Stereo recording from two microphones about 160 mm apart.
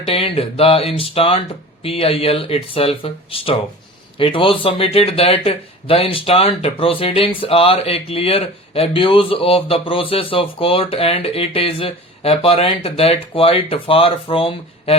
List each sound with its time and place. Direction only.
0.0 s speech: 35° left (ahead or behind)